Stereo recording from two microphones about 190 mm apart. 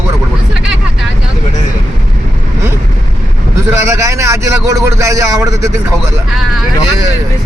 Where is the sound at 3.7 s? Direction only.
15° right (ahead or behind).